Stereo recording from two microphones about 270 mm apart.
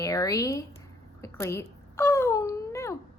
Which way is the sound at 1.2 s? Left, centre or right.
Centre.